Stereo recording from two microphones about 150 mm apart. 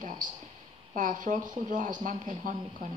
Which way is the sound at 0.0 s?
60° right (ahead or behind).